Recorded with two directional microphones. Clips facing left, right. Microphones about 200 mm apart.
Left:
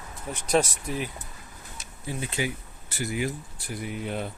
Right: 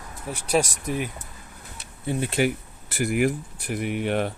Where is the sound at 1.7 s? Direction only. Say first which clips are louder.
Right 7 dB; 65° right (ahead or behind).